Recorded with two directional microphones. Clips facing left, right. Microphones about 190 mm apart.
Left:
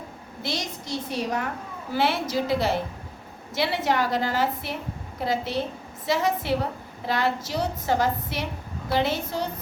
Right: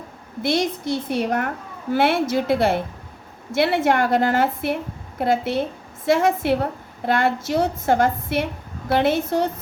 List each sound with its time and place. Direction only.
0.4 s a woman's voice: 55° right (ahead or behind)